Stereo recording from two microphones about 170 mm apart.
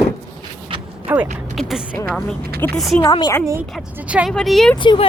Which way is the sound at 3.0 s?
20° left (ahead or behind).